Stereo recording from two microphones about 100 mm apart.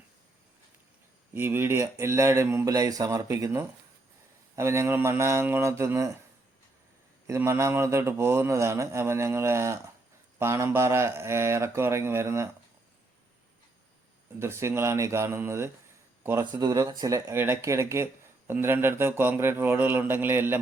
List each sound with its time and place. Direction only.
1.3 s speech: 20° right (ahead or behind)
7.3 s speech: 25° right (ahead or behind)
14.3 s speech: 25° right (ahead or behind)
16.4 s speech: 40° right (ahead or behind)
17.3 s speech: 25° right (ahead or behind)